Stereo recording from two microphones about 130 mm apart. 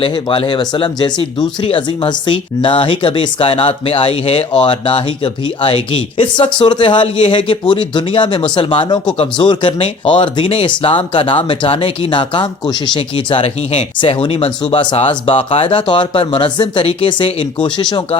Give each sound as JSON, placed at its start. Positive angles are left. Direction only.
{"t": 0.0, "sound": "speech", "side_deg": 40}